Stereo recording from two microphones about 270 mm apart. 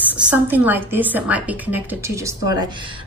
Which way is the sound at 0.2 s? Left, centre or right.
Centre.